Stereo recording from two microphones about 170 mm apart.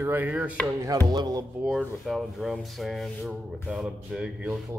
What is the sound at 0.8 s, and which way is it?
Music, 20° right (ahead or behind).